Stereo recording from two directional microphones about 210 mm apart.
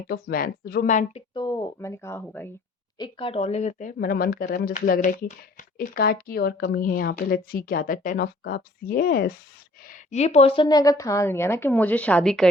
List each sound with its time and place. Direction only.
0.1 s speech: 45° left (ahead or behind)
1.3 s a woman's voice: 20° left (ahead or behind)
3.0 s speech: 25° left (ahead or behind); by 9.3 s 45° left (ahead or behind)
9.9 s a woman's voice: 35° left (ahead or behind); by 12.5 s centre (ahead or behind)